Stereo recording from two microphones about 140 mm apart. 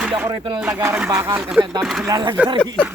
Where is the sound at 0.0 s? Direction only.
5° right (ahead or behind).